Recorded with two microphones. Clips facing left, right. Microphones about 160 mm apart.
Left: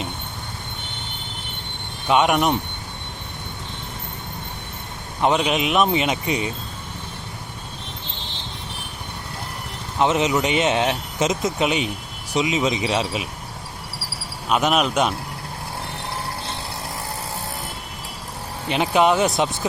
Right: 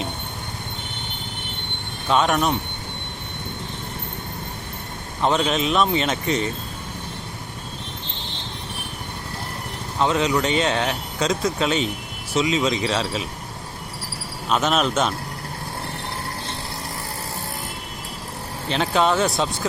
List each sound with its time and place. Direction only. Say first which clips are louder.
2.0 s speech: left 2 dB; 15° left (ahead or behind)
5.2 s speech: left 1 dB; 15° left (ahead or behind)
10.0 s speech: left 1 dB; 20° left (ahead or behind)
14.5 s speech: left 1 dB; 10° left (ahead or behind)
18.7 s speech: left 2 dB; 15° left (ahead or behind)